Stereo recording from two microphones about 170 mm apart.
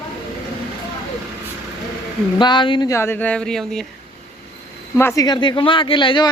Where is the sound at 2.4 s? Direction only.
25° left (ahead or behind).